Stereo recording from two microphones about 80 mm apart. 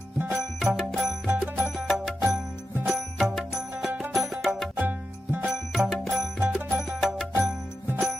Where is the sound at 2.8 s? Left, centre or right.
Centre.